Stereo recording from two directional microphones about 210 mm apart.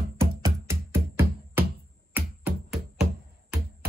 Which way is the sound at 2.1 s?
5° right (ahead or behind).